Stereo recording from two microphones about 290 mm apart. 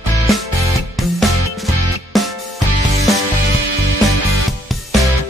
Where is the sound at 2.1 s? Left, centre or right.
Centre.